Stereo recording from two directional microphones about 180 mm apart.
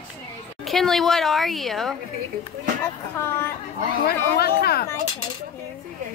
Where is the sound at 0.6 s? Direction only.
Centre (ahead or behind).